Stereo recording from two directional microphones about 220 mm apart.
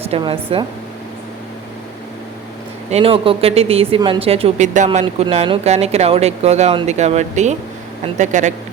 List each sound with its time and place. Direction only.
0.1 s speech: 25° right (ahead or behind)
2.9 s speech: 25° right (ahead or behind)